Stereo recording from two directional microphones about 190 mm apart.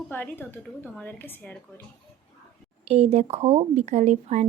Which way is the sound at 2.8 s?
35° right (ahead or behind).